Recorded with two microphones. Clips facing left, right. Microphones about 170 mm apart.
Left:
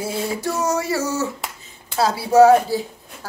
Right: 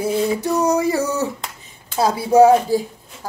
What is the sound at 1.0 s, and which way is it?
Speech, 60° right (ahead or behind).